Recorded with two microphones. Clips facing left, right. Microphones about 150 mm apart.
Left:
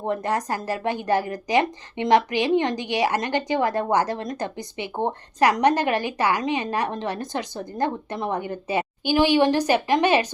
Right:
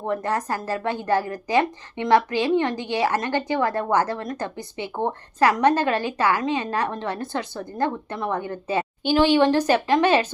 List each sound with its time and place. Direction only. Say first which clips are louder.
0.0 s speech: even; 20° left (ahead or behind)